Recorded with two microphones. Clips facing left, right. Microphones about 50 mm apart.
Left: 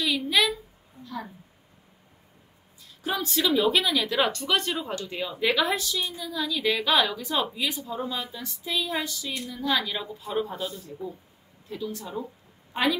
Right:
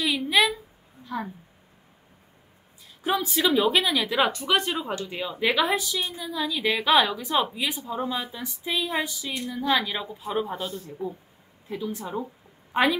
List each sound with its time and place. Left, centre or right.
0.0 s a sound: centre
3.0 s a woman's voice: centre
11.7 s speech: right